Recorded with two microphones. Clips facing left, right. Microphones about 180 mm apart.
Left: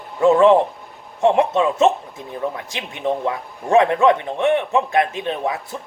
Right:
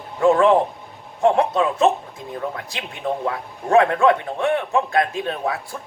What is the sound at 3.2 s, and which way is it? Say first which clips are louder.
A man's voice: left 1 dB; 20° left (ahead or behind).